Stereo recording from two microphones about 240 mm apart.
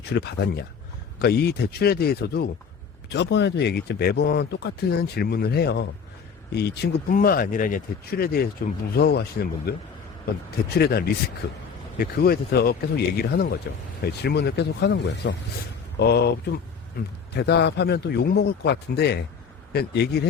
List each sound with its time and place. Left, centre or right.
0.1 s speech: left
10.8 s speech: left